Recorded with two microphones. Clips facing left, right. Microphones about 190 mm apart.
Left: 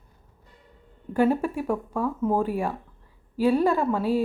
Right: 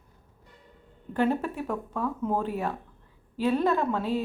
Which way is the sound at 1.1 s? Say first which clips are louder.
Left 4 dB; 10° left (ahead or behind).